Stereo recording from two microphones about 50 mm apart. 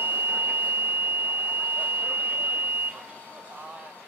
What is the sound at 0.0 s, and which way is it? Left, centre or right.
Beep, right.